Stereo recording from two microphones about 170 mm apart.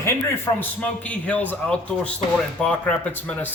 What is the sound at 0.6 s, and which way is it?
Speech, 10° left (ahead or behind).